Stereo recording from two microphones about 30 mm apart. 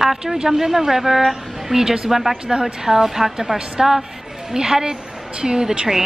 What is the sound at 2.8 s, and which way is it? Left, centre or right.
A woman's voice, centre.